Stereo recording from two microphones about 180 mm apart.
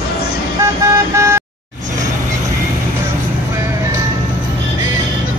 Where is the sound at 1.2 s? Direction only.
15° right (ahead or behind).